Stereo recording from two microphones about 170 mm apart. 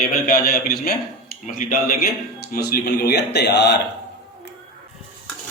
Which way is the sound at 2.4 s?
65° left (ahead or behind).